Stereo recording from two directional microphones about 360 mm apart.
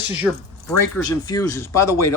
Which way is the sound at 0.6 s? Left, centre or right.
Centre.